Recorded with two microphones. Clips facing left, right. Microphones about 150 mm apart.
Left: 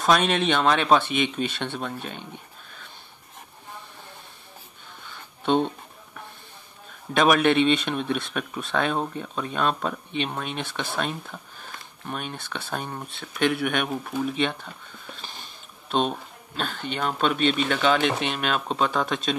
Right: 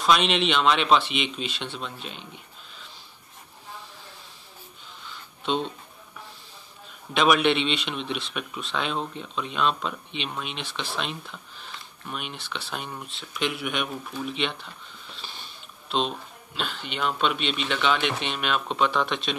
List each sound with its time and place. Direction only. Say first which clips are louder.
0.0 s speech: left 1 dB; 45° left (ahead or behind)
5.1 s music: left 5 dB; 55° left (ahead or behind)
7.2 s speech: left 2 dB; 45° left (ahead or behind)